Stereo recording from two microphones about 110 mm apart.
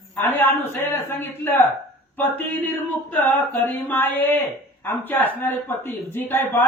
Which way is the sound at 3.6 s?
15° left (ahead or behind).